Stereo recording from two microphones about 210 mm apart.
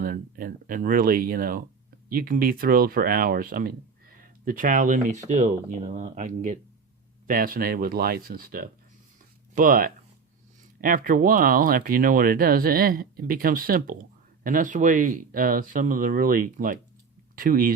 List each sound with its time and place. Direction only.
0.0 s speech: 45° right (ahead or behind)